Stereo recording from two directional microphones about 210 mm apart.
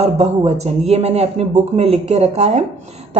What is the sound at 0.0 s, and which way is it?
Speech, 30° right (ahead or behind).